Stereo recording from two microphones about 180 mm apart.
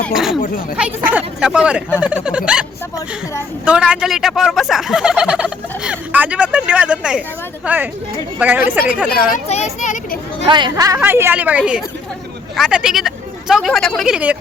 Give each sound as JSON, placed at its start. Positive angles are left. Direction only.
{"t": 0.0, "sound": "turkey", "side_deg": 0}
{"t": 0.8, "sound": "a woman's voice", "side_deg": -10}
{"t": 3.7, "sound": "turkey", "side_deg": -5}
{"t": 7.6, "sound": "a woman's voice", "side_deg": -10}
{"t": 9.5, "sound": "speech", "side_deg": 35}
{"t": 10.4, "sound": "a woman's voice", "side_deg": -25}